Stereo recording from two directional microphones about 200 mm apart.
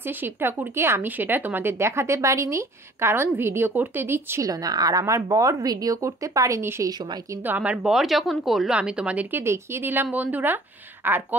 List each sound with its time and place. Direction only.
0.0 s speech: 10° right (ahead or behind)